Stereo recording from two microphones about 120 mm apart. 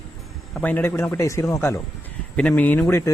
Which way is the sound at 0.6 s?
15° left (ahead or behind).